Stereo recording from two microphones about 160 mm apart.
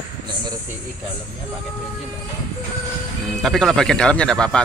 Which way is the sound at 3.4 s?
Centre (ahead or behind).